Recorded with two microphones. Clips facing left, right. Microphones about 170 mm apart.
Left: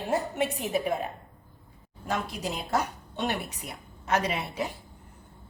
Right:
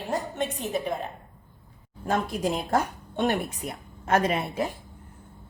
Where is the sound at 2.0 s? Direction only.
50° right (ahead or behind).